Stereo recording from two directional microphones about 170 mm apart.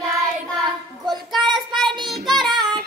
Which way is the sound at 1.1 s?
Centre (ahead or behind).